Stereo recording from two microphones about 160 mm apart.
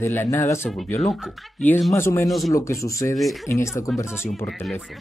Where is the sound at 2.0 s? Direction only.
15° left (ahead or behind).